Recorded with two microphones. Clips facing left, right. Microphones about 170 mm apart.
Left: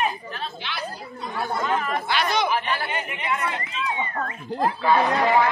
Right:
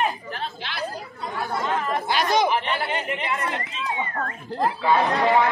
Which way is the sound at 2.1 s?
40° right (ahead or behind).